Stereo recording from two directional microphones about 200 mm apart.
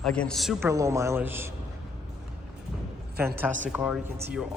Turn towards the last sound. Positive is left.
turn(degrees=-5)  # may be behind; listen again after turning